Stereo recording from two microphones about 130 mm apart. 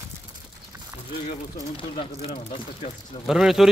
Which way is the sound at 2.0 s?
45° left (ahead or behind).